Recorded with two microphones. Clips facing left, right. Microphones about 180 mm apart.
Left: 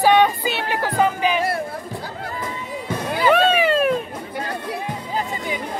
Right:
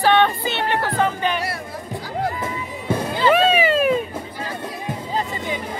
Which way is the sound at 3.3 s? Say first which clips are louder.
Even; centre (ahead or behind).